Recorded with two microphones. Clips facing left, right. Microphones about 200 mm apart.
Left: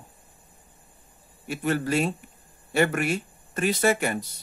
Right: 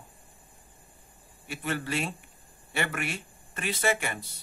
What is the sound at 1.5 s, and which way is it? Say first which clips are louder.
Speech: left 7 dB; 45° left (ahead or behind).